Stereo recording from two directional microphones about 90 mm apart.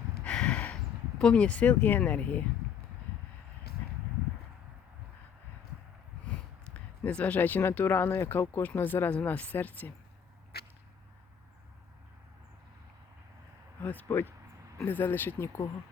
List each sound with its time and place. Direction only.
0.3 s a sound: 10° left (ahead or behind)
1.2 s speech: 10° left (ahead or behind)
6.3 s speech: 15° left (ahead or behind)
13.8 s speech: 20° left (ahead or behind)